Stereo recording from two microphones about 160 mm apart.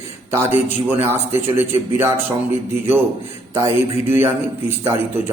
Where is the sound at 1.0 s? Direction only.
15° right (ahead or behind).